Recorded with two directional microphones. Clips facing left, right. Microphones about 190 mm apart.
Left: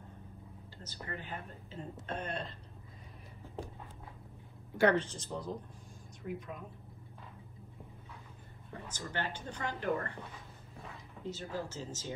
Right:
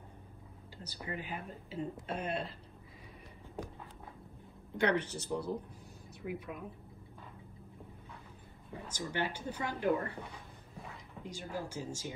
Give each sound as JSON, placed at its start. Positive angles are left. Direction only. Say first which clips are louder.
{"t": 0.8, "sound": "speech", "louder": "right 2 dB", "side_deg": -15}
{"t": 4.7, "sound": "speech", "louder": "left 3 dB", "side_deg": -15}
{"t": 8.8, "sound": "speech", "louder": "right 3 dB", "side_deg": -10}
{"t": 11.2, "sound": "speech", "louder": "left 2 dB", "side_deg": -15}